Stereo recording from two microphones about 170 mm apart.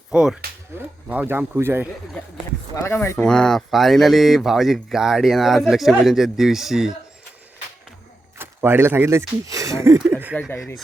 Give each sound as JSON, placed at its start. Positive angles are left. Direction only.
{"t": 0.1, "sound": "speech", "side_deg": -5}
{"t": 2.7, "sound": "speech", "side_deg": 15}
{"t": 8.4, "sound": "speech", "side_deg": -15}
{"t": 10.3, "sound": "speech", "side_deg": 10}